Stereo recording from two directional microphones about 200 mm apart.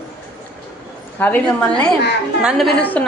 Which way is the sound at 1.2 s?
10° left (ahead or behind).